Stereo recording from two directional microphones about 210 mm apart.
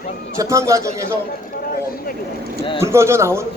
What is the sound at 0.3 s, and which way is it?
Speech, 15° right (ahead or behind).